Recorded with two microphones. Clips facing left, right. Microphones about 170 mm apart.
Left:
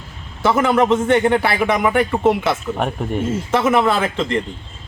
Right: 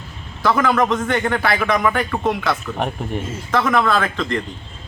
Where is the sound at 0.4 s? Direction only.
25° left (ahead or behind).